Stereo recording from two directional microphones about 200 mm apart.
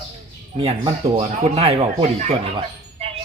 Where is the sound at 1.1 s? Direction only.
25° right (ahead or behind).